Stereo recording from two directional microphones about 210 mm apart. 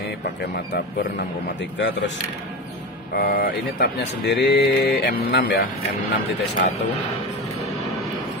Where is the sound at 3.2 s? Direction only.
50° left (ahead or behind).